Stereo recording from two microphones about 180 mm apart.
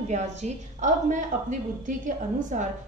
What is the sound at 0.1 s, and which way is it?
A woman's voice, 40° right (ahead or behind).